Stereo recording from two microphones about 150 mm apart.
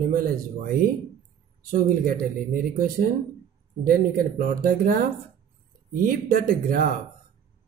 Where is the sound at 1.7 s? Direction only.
65° right (ahead or behind).